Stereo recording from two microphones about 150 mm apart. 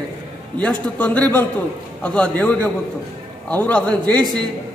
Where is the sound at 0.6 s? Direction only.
10° left (ahead or behind).